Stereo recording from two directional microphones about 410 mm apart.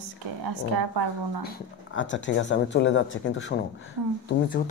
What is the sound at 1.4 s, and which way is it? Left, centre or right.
Speech, left.